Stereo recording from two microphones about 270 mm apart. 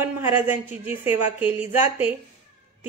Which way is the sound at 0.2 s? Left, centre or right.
Centre.